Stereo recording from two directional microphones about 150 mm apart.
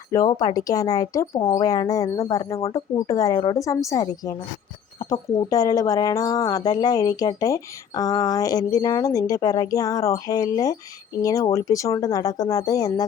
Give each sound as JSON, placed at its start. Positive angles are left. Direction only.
{"t": 0.1, "sound": "speech", "side_deg": 25}